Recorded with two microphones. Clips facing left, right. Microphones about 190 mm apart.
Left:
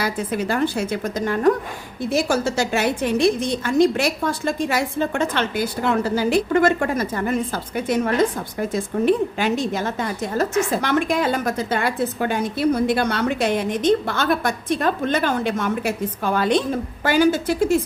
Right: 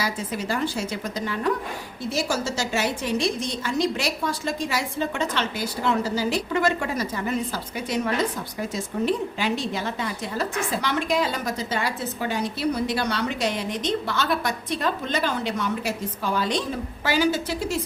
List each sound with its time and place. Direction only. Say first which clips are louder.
0.0 s a woman's voice: left 5 dB; 55° left (ahead or behind)